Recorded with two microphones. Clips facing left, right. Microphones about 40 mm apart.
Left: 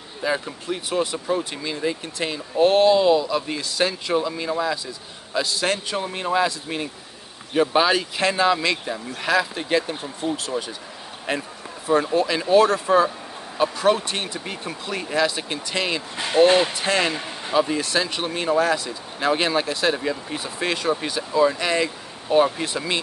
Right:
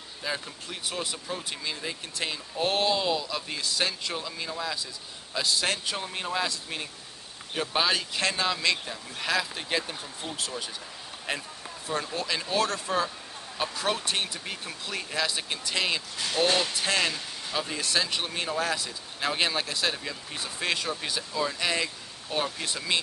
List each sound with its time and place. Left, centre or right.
0.2 s speech: centre
5.3 s a man's voice: centre
16.4 s speech: left
16.7 s speech: centre
17.1 s a sound: left
17.6 s speech: centre
20.0 s speech: centre
20.6 s a man's voice: centre